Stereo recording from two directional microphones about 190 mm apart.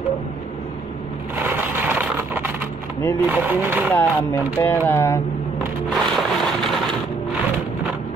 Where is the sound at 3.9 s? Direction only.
10° left (ahead or behind).